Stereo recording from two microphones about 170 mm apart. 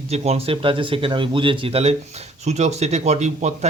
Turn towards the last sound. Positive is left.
turn(degrees=-40)  # may be behind; listen again after turning